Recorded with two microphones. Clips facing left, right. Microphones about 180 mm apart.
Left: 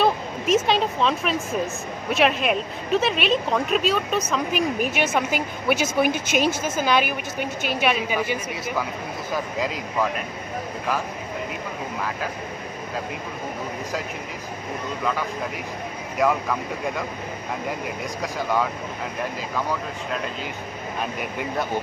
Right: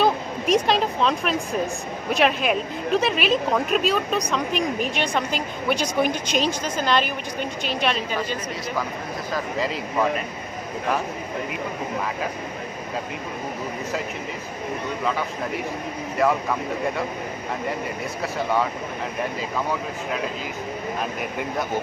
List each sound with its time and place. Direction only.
0.0 s speech: centre (ahead or behind)
9.6 s speech: centre (ahead or behind)
21.2 s speech: centre (ahead or behind)